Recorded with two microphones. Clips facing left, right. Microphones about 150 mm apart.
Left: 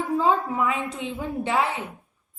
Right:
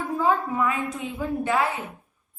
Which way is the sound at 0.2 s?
25° left (ahead or behind).